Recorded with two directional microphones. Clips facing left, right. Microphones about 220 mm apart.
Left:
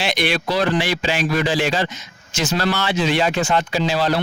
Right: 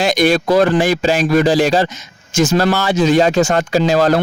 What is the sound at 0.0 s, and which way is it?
A man's voice, 45° right (ahead or behind).